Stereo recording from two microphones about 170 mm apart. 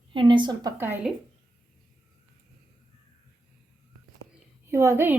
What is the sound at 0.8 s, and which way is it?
Speech, 10° right (ahead or behind).